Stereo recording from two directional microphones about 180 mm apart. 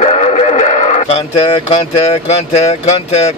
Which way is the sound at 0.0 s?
40° left (ahead or behind).